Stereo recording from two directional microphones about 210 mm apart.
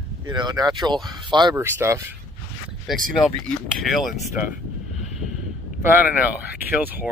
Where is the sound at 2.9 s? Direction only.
Centre (ahead or behind).